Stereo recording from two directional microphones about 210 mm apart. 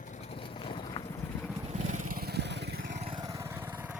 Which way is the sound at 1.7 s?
35° right (ahead or behind).